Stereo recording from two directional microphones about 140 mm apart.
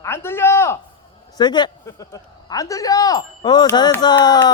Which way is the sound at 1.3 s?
30° left (ahead or behind).